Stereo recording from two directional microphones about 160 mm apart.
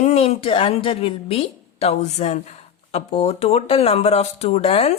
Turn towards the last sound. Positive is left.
turn(degrees=40)  # may be behind; listen again after turning